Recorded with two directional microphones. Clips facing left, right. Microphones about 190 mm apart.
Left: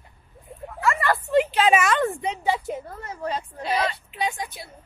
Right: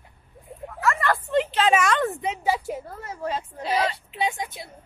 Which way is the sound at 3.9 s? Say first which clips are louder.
Right 1 dB; 25° right (ahead or behind).